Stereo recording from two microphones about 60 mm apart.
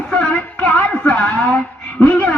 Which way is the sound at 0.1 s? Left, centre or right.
Left.